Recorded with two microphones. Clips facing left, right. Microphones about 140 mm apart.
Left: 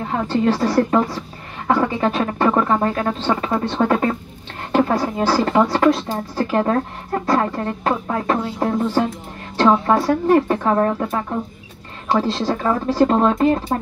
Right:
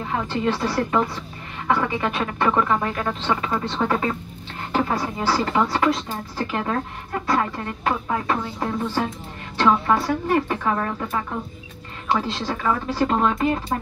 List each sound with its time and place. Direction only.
0.3 s speech: 35° left (ahead or behind)